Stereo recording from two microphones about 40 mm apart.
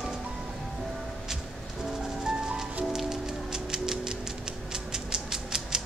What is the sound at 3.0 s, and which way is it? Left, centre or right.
Music, centre.